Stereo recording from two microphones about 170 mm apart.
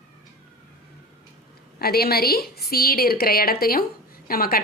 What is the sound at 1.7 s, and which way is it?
A woman's voice, 65° left (ahead or behind).